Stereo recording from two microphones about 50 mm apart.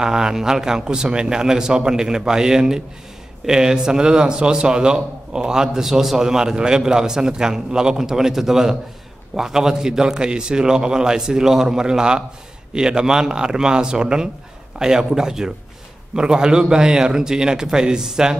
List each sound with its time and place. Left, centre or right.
0.0 s a man's voice: centre